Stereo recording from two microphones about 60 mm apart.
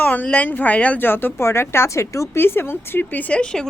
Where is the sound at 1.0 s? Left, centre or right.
Left.